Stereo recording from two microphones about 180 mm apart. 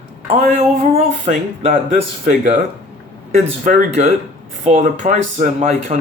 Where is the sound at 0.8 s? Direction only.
35° right (ahead or behind).